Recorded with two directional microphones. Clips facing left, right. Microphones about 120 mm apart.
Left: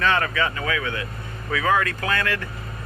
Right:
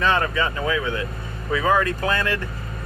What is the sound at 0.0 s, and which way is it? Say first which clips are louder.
Speech: right 1 dB; 20° right (ahead or behind).